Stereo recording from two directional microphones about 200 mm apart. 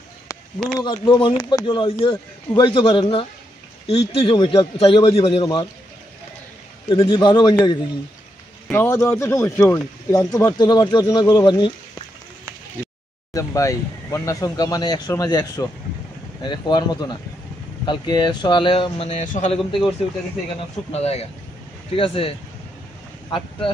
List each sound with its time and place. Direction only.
0.6 s speech: 5° left (ahead or behind)
0.9 s speech: 25° left (ahead or behind)
6.9 s speech: 25° left (ahead or behind)
8.6 s speech: 10° left (ahead or behind)
13.3 s speech: 15° left (ahead or behind)
20.9 s speech: 30° left (ahead or behind)